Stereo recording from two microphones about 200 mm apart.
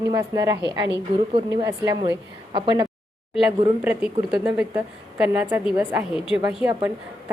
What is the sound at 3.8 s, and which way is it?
A woman's voice, 5° right (ahead or behind).